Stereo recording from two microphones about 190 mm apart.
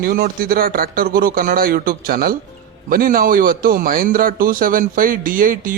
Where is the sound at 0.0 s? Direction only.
50° right (ahead or behind).